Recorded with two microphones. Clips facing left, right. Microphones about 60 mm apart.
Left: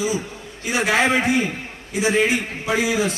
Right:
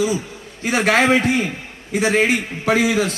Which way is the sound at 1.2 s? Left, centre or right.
Centre.